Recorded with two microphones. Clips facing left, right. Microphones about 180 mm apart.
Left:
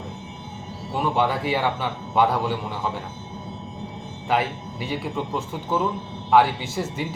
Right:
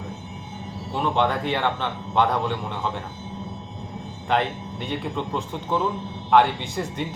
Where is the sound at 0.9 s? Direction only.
5° left (ahead or behind).